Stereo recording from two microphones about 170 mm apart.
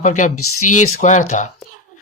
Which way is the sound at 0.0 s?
45° left (ahead or behind).